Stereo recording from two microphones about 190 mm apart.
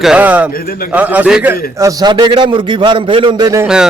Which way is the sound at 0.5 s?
50° left (ahead or behind).